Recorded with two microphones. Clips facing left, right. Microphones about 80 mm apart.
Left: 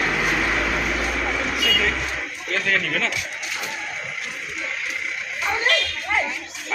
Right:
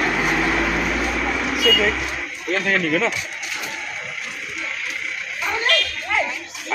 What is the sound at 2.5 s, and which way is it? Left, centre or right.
Speech, centre.